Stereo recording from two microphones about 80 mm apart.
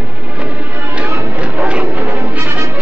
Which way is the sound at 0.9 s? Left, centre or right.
Centre.